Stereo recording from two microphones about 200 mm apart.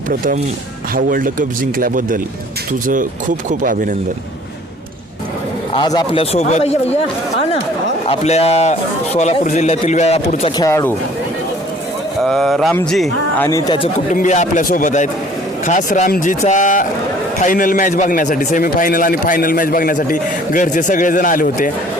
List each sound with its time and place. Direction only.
0.9 s speech: 45° right (ahead or behind)
5.7 s speech: 20° left (ahead or behind)
6.3 s a man's voice: 35° left (ahead or behind)
8.1 s a man's voice: 30° left (ahead or behind)
10.6 s speech: 15° left (ahead or behind)
12.2 s a man's voice: centre (ahead or behind)
13.5 s speech: 25° left (ahead or behind)
14.1 s a man's voice: 40° left (ahead or behind)